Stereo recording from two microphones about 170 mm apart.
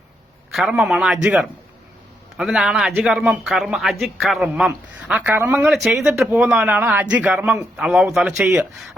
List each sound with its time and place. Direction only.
0.5 s speech: 5° right (ahead or behind)
5.6 s speech: centre (ahead or behind)